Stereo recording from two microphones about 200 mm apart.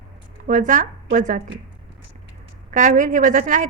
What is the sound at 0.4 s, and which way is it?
Speech, 40° right (ahead or behind).